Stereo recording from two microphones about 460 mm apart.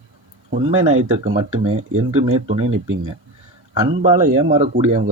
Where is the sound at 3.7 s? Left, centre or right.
Centre.